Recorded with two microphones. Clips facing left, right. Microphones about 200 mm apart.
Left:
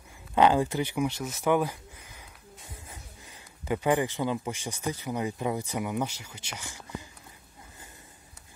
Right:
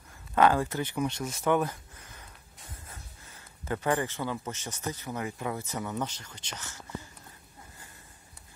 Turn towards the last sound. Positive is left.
turn(degrees=15)  # may be behind; listen again after turning